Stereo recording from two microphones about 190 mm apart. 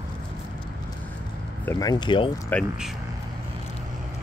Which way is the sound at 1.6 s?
20° left (ahead or behind).